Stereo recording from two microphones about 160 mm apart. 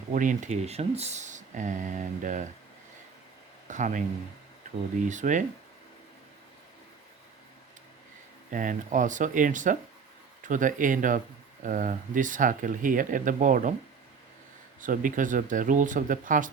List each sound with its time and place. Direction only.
0.1 s speech: 55° right (ahead or behind)
3.7 s speech: 50° right (ahead or behind)
5.0 s speech: 50° right (ahead or behind)
8.4 s speech: 55° right (ahead or behind)
14.8 s speech: 55° right (ahead or behind)